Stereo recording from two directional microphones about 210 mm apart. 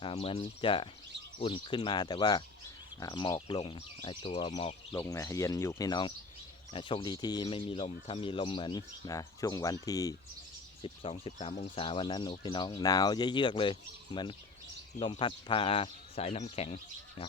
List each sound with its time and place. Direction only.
0.0 s speech: 25° left (ahead or behind)